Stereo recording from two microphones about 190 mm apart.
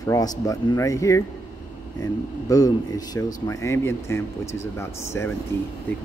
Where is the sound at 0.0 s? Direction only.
20° left (ahead or behind).